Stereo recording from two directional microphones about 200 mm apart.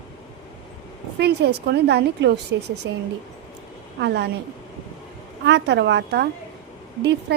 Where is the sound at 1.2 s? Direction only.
55° right (ahead or behind).